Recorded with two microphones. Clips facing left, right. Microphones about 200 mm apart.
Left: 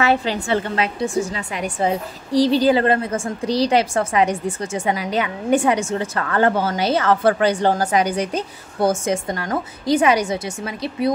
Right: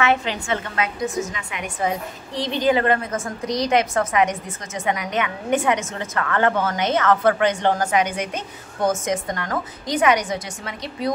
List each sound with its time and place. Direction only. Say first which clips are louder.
0.0 s a woman's voice: left 2 dB; 35° left (ahead or behind)